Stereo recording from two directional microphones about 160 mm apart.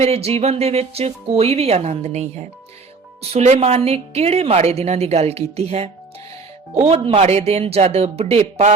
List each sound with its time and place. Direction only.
0.0 s a woman's voice: 40° right (ahead or behind)